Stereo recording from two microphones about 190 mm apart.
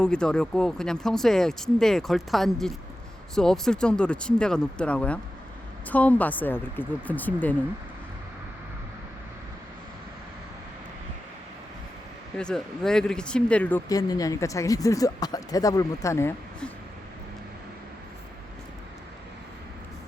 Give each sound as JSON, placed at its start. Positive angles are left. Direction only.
{"t": 0.0, "sound": "speech", "side_deg": 5}
{"t": 12.4, "sound": "speech", "side_deg": 5}